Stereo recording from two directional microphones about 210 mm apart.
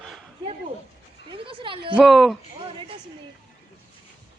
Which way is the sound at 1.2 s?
25° right (ahead or behind).